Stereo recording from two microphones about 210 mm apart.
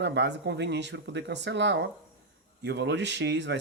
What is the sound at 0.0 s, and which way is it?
Speech, 55° right (ahead or behind).